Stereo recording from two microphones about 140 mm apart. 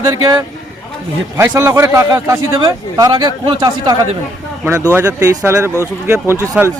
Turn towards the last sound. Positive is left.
turn(degrees=-20)  # may be behind; listen again after turning